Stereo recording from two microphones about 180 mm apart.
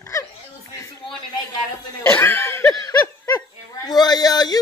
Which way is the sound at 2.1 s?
10° left (ahead or behind).